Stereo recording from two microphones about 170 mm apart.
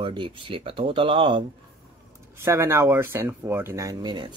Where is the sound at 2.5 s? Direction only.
15° right (ahead or behind).